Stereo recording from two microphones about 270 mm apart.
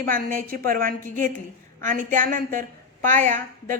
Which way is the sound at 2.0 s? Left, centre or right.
Right.